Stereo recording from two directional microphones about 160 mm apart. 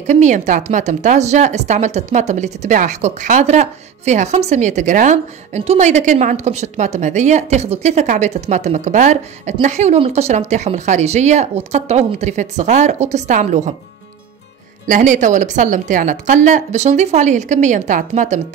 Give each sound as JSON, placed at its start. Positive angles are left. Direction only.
{"t": 0.0, "sound": "speech", "side_deg": -50}
{"t": 14.9, "sound": "speech", "side_deg": -55}